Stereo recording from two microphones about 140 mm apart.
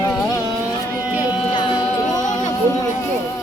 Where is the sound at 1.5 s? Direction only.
35° left (ahead or behind).